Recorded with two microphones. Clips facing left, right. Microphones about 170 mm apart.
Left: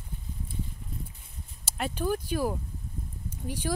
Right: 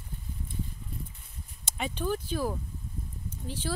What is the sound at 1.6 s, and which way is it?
Speech, 5° left (ahead or behind).